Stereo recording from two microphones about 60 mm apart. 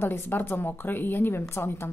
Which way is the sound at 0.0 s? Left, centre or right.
Left.